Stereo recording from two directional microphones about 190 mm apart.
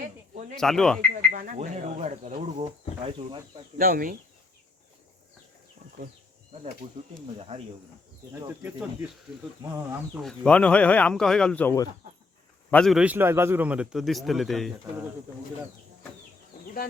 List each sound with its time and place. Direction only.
0.0 s a sound: 45° right (ahead or behind)
0.5 s a man's voice: centre (ahead or behind)
1.1 s a sound: 45° right (ahead or behind)
1.5 s speech: 40° right (ahead or behind)
3.8 s speech: 45° right (ahead or behind)
7.3 s speech: 30° right (ahead or behind)
10.2 s speech: 5° left (ahead or behind)
12.7 s a man's voice: centre (ahead or behind)